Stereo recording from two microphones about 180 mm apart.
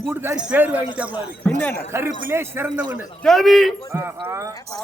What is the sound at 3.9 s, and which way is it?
Speech, 15° right (ahead or behind).